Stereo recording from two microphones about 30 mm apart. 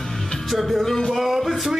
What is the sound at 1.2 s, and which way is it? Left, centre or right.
Music, centre.